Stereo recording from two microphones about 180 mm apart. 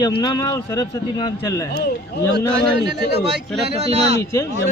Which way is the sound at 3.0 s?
70° left (ahead or behind).